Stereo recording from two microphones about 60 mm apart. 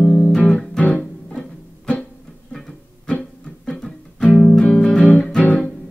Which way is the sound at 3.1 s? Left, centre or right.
Centre.